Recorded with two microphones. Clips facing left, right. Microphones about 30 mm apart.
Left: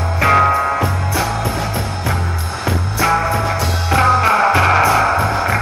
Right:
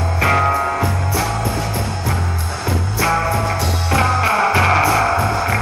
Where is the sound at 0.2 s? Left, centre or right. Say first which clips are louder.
Left 3 dB; centre.